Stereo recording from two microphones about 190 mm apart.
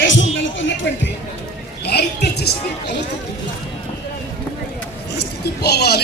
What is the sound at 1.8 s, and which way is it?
Speech, 60° left (ahead or behind).